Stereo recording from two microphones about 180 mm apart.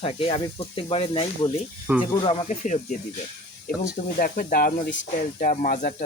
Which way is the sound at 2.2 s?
30° left (ahead or behind).